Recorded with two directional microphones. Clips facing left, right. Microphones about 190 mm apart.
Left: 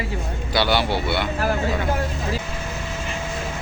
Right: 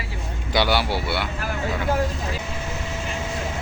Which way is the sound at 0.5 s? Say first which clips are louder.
Left 1 dB; 10° right (ahead or behind).